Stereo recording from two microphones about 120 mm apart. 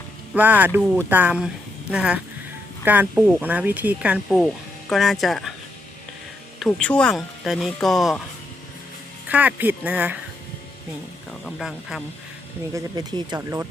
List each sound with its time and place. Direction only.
0.3 s speech: 15° right (ahead or behind)
4.3 s speech: 5° left (ahead or behind)
6.7 s speech: 10° left (ahead or behind)
9.3 s speech: 10° right (ahead or behind)
11.4 s speech: centre (ahead or behind)
12.7 s speech: 35° right (ahead or behind)